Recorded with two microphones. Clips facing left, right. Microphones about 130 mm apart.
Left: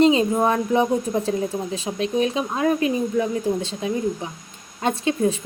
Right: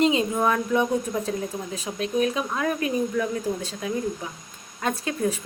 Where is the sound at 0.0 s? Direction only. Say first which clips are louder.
Left 4 dB; 35° left (ahead or behind).